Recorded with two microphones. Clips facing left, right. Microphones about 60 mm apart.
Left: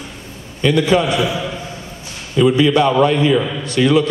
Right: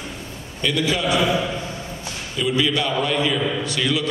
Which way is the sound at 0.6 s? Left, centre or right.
Left.